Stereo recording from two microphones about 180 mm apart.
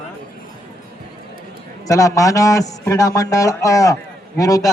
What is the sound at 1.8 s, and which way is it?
A man's voice, 20° left (ahead or behind).